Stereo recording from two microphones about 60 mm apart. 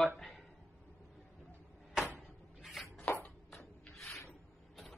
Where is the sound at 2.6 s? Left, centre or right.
Centre.